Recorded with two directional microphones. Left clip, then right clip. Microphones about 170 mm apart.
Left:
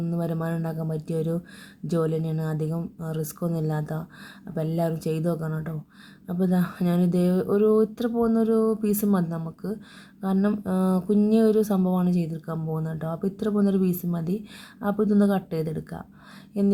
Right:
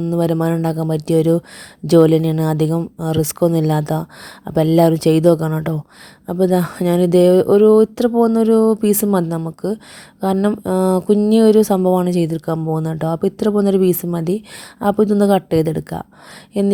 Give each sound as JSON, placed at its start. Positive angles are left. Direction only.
{"t": 0.0, "sound": "a woman's voice", "side_deg": -50}